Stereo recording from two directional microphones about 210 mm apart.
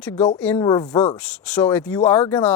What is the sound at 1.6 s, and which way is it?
Speech, 10° left (ahead or behind).